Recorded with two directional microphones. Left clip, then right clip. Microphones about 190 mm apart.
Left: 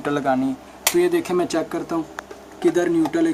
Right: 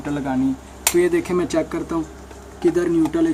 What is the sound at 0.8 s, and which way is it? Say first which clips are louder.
Speech: right 1 dB; 15° left (ahead or behind).